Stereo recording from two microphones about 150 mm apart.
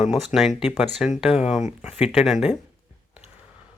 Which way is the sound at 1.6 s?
50° left (ahead or behind).